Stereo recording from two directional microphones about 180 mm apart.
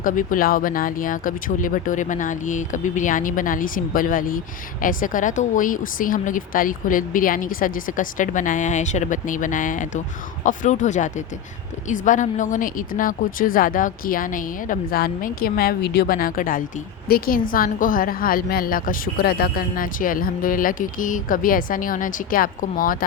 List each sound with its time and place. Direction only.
0.0 s a woman's voice: 50° left (ahead or behind)